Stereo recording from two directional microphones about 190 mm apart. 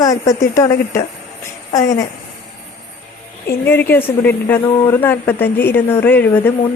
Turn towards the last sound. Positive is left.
turn(degrees=10)  # may be behind; listen again after turning